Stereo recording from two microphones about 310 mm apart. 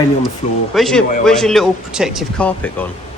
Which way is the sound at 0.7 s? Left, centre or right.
Centre.